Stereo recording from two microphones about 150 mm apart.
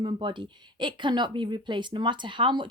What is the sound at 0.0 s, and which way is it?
A woman's voice, 30° right (ahead or behind).